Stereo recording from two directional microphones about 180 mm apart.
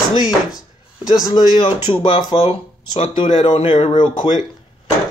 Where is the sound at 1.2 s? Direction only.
25° left (ahead or behind).